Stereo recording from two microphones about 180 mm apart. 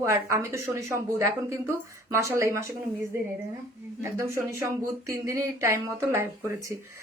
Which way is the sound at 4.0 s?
15° right (ahead or behind).